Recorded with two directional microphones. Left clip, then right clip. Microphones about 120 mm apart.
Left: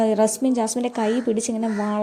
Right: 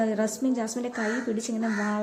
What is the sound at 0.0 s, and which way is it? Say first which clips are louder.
A woman's voice: left 8 dB; 50° left (ahead or behind).